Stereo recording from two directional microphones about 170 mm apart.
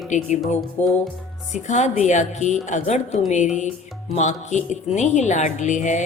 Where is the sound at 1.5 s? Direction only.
45° left (ahead or behind).